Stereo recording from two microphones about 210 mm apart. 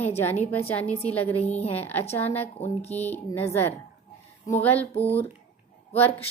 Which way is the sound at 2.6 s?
30° left (ahead or behind).